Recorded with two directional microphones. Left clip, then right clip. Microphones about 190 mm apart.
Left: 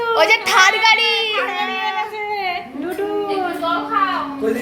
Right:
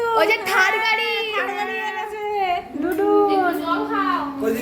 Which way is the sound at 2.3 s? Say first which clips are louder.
Right 2 dB; 65° right (ahead or behind).